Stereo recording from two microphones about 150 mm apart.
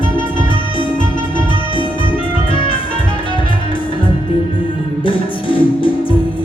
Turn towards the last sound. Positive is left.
turn(degrees=35)  # may be behind; listen again after turning